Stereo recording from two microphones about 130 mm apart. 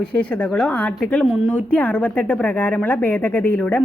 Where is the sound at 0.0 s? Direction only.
10° left (ahead or behind).